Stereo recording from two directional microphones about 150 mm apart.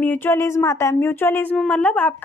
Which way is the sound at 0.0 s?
15° left (ahead or behind).